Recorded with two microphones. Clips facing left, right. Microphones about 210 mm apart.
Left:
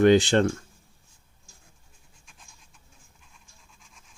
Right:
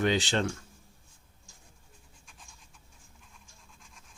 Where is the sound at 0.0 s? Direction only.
50° left (ahead or behind).